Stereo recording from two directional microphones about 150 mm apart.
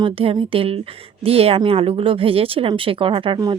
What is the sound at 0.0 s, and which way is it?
Speech, 40° right (ahead or behind).